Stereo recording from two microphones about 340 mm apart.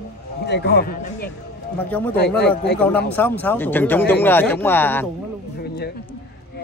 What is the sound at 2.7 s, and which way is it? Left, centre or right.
Speech, centre.